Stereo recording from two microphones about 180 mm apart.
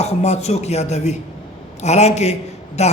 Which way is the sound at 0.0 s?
35° left (ahead or behind).